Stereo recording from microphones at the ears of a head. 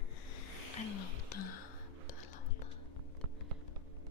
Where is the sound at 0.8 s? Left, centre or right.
Left.